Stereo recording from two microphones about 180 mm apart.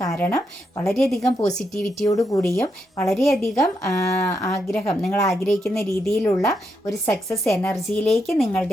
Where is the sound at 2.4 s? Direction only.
10° left (ahead or behind).